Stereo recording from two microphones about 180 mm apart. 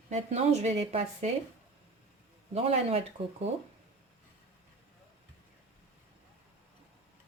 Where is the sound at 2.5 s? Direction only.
35° right (ahead or behind).